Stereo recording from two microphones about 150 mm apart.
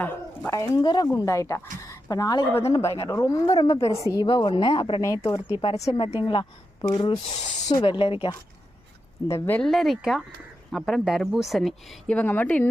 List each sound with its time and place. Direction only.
0.0 s a woman's voice: 15° left (ahead or behind)
1.8 s a sound: 25° left (ahead or behind)
2.7 s a woman's voice: 20° left (ahead or behind)
5.6 s speech: 45° left (ahead or behind)
5.9 s a woman's voice: 35° left (ahead or behind)
9.2 s a woman's voice: 20° left (ahead or behind)
9.6 s speech: centre (ahead or behind)